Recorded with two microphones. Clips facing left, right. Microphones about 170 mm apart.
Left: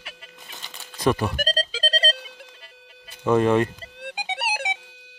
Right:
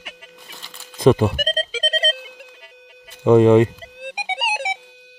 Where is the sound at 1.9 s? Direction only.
20° right (ahead or behind).